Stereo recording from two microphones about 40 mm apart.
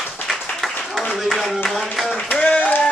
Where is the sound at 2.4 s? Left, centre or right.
Left.